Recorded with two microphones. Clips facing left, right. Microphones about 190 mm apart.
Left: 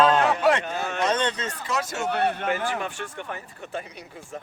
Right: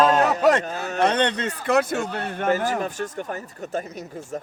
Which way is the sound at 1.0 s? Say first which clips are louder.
Right 5 dB; 60° right (ahead or behind).